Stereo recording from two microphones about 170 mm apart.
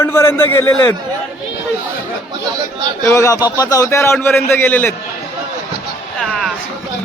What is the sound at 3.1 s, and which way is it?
Speech, 20° left (ahead or behind).